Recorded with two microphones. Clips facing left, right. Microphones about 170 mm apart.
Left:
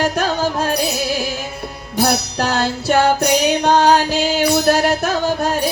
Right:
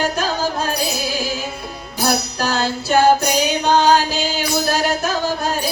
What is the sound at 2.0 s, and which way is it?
Music, 65° left (ahead or behind).